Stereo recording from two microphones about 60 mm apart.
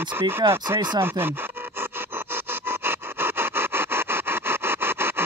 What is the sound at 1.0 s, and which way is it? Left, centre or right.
Speech, right.